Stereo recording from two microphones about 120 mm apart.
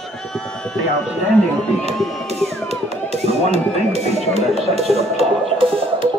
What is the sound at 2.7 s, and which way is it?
Music, 60° right (ahead or behind).